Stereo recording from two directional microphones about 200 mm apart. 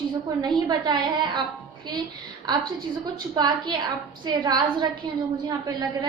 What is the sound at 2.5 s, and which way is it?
A woman's voice, 20° right (ahead or behind).